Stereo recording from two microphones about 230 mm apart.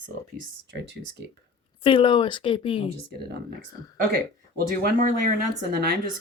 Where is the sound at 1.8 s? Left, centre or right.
Left.